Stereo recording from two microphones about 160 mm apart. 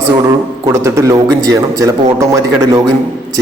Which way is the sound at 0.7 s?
20° right (ahead or behind).